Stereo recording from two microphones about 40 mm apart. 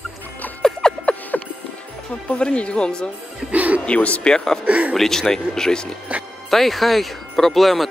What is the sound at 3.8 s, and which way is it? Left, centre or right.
Speech, left.